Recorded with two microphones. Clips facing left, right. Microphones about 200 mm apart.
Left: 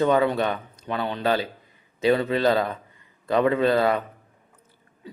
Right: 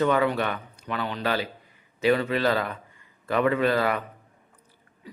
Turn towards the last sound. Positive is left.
turn(degrees=25)  # may be behind; listen again after turning